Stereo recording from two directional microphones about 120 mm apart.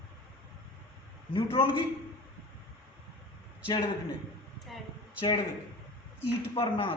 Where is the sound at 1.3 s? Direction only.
45° left (ahead or behind).